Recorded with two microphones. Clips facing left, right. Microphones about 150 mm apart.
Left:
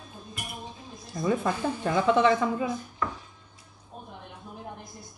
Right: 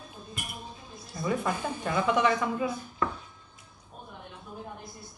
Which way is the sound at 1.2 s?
30° left (ahead or behind).